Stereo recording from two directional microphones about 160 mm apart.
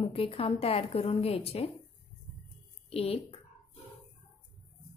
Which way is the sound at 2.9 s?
40° left (ahead or behind).